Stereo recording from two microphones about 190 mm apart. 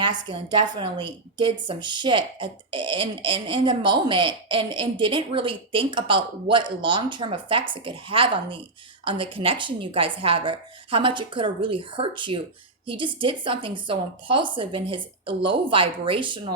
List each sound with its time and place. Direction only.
0.3 s a woman's voice: 25° right (ahead or behind)